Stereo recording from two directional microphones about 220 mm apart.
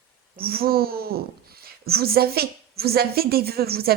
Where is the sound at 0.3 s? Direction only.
45° right (ahead or behind).